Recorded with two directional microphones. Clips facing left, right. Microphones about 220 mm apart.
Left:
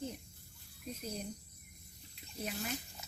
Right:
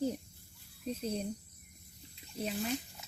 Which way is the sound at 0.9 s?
30° right (ahead or behind).